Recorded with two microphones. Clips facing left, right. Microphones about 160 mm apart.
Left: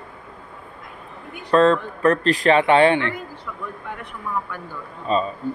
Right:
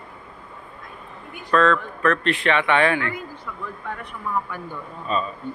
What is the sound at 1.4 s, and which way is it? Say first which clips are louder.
Speech: left 3 dB; 35° left (ahead or behind).